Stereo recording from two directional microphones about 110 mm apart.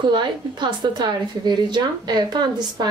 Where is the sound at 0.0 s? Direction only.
45° right (ahead or behind).